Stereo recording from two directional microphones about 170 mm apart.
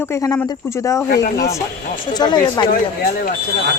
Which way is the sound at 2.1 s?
25° left (ahead or behind).